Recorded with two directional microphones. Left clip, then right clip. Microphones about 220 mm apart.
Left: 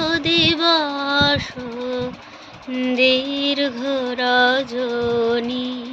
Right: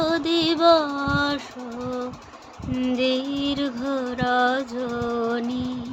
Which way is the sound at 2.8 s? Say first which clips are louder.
Left 7 dB; 10° right (ahead or behind).